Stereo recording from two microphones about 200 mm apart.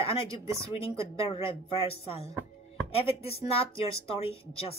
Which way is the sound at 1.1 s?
30° left (ahead or behind).